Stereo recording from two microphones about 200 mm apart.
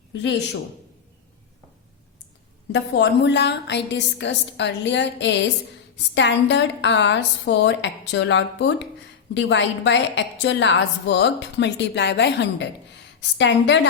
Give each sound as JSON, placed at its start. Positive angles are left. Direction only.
{"t": 0.1, "sound": "a man's voice", "side_deg": 60}
{"t": 2.7, "sound": "a woman's voice", "side_deg": 60}